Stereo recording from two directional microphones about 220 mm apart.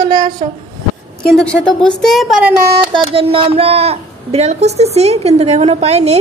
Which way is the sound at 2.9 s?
25° right (ahead or behind).